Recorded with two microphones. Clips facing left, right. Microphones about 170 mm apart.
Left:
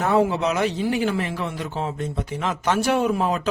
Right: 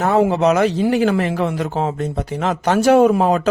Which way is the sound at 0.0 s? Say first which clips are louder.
Right 5 dB; 40° right (ahead or behind).